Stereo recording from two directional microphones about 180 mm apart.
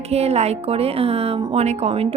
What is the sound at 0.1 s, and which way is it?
Speech, 35° right (ahead or behind).